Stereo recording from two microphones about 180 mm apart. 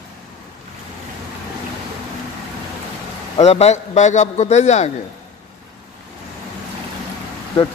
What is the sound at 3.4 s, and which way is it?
A man's voice, 35° left (ahead or behind).